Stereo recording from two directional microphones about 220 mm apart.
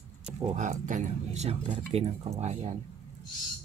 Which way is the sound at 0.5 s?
35° right (ahead or behind).